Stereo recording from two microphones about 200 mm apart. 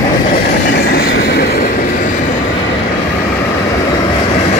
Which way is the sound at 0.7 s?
50° left (ahead or behind).